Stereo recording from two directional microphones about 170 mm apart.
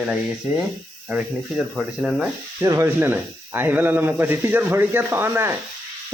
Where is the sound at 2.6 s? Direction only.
15° right (ahead or behind).